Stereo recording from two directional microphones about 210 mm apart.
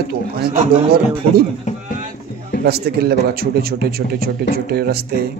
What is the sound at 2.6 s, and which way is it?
Speech, 50° right (ahead or behind).